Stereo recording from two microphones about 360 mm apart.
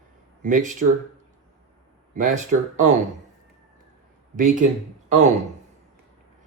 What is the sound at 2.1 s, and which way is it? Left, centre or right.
Speech, centre.